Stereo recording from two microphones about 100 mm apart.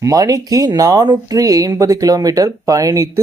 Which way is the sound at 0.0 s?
35° right (ahead or behind).